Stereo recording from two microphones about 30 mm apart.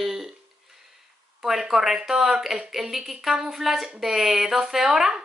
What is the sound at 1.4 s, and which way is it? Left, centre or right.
A woman's voice, centre.